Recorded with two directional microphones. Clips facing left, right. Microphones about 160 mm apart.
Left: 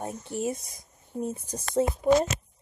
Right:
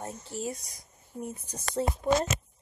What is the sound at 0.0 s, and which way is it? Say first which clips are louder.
Speech: left 5 dB; 20° left (ahead or behind).